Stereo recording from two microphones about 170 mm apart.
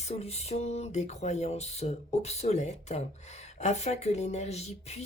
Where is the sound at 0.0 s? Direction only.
35° left (ahead or behind).